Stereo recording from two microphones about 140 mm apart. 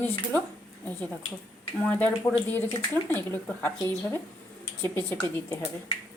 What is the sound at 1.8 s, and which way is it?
Speech, 10° left (ahead or behind).